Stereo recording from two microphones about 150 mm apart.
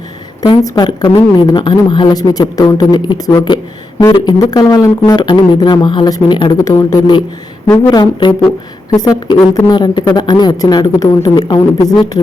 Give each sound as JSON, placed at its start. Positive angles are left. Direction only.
{"t": 0.4, "sound": "a woman's voice", "side_deg": 30}